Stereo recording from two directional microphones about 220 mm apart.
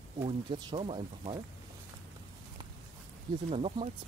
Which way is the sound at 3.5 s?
25° right (ahead or behind).